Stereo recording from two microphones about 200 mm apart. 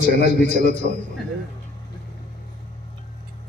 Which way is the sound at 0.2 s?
50° left (ahead or behind).